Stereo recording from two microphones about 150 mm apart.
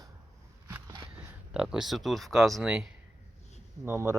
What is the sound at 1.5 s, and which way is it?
Speech, 5° right (ahead or behind).